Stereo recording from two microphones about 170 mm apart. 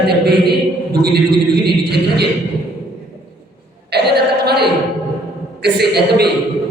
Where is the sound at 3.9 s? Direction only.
70° right (ahead or behind).